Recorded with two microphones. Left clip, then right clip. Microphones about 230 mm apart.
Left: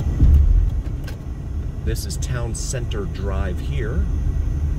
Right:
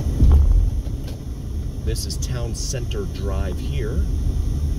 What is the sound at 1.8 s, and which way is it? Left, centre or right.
Speech, centre.